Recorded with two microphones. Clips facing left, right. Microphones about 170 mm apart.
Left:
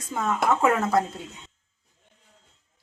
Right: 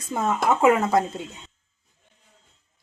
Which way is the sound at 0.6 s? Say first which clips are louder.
Right 6 dB; 15° right (ahead or behind).